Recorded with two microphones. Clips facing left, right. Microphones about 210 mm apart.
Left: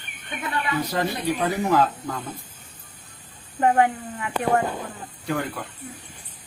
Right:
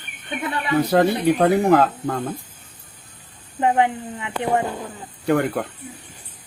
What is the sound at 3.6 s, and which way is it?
Speech, 15° right (ahead or behind).